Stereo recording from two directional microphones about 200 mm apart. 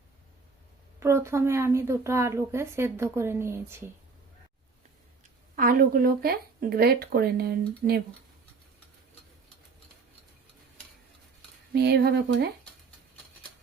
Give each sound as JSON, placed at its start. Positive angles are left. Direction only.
{"t": 0.9, "sound": "speech", "side_deg": -15}
{"t": 5.5, "sound": "speech", "side_deg": -45}
{"t": 11.7, "sound": "speech", "side_deg": -55}